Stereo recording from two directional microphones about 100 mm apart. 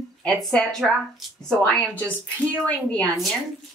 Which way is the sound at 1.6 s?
15° left (ahead or behind).